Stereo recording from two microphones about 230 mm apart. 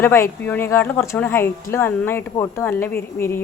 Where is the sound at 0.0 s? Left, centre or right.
Centre.